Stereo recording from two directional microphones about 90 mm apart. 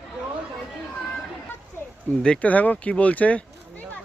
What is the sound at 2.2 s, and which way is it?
Speech, 10° left (ahead or behind).